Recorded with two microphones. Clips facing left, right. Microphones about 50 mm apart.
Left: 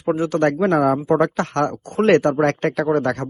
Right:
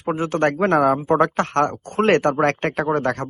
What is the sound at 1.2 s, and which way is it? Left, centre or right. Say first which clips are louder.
A man's voice: right 1 dB; right.